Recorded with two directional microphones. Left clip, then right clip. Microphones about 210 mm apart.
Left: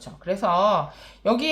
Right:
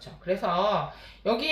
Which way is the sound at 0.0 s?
30° left (ahead or behind).